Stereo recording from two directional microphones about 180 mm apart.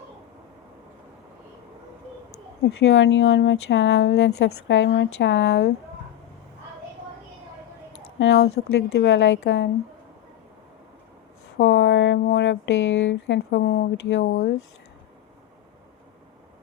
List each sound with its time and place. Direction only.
2.6 s speech: 90° left
8.2 s a woman's voice: 80° left
11.5 s speech: 85° left